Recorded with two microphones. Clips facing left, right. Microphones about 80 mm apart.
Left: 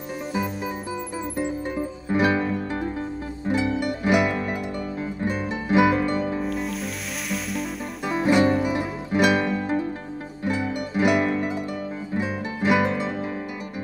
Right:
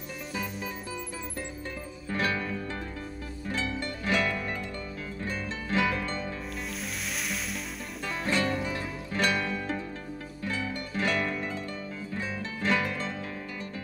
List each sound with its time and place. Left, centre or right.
1.4 s music: left
6.4 s music: centre
8.0 s music: centre